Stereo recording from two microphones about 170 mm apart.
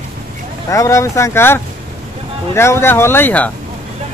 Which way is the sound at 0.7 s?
20° left (ahead or behind).